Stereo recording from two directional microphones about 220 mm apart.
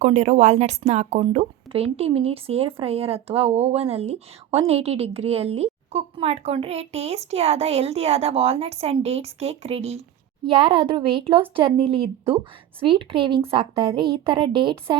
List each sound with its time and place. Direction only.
0.0 s speech: 30° right (ahead or behind)